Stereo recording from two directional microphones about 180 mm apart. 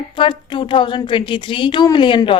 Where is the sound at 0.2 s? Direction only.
30° left (ahead or behind).